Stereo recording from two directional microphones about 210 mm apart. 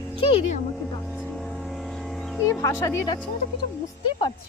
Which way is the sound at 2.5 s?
15° left (ahead or behind).